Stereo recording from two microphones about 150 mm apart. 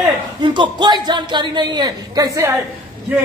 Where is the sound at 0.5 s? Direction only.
30° right (ahead or behind).